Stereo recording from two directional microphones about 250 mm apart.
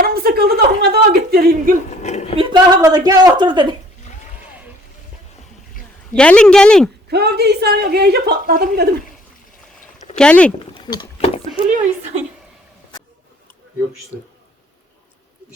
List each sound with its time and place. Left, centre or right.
0.0 s a sound: right
2.0 s a sound: left
2.3 s a woman's voice: centre
6.1 s speech: centre
7.1 s speech: right
10.2 s speech: centre
10.8 s speech: centre